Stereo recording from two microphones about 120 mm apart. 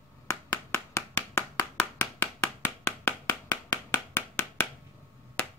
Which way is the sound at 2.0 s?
20° left (ahead or behind).